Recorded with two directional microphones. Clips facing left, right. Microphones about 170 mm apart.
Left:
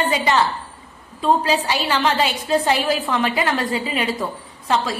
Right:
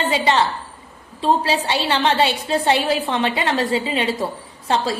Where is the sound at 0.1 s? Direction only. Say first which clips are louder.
Right 1 dB; 25° right (ahead or behind).